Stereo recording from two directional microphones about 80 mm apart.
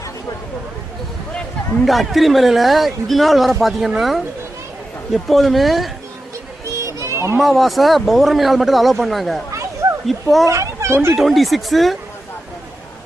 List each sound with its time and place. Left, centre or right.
1.8 s speech: centre
6.7 s a sound: right
7.3 s a child's voice: centre
10.4 s a child's voice: right
11.1 s speech: centre